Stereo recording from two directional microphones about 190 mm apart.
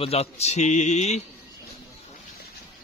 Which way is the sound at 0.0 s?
30° left (ahead or behind).